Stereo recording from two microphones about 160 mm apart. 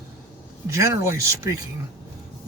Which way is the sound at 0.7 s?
20° right (ahead or behind).